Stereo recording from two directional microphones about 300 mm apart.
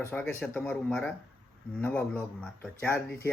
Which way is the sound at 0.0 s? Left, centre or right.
Centre.